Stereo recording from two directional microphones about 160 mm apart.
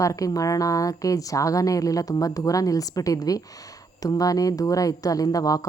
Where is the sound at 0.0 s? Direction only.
20° left (ahead or behind).